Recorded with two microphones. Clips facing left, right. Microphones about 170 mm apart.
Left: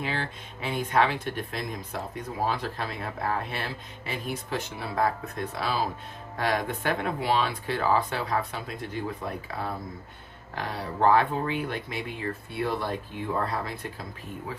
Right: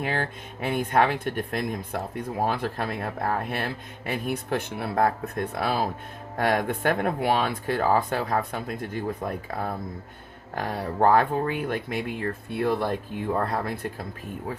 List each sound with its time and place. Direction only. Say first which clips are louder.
0.0 s speech: right 4 dB; 50° right (ahead or behind)